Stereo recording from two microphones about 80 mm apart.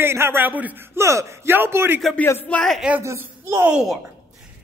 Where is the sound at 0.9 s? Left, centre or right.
Right.